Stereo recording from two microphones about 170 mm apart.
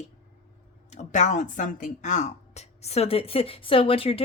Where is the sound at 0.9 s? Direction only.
45° left (ahead or behind).